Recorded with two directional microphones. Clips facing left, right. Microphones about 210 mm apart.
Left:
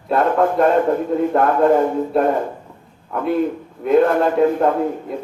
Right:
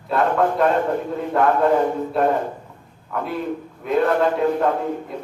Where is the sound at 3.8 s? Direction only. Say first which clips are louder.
Left 4 dB; 50° left (ahead or behind).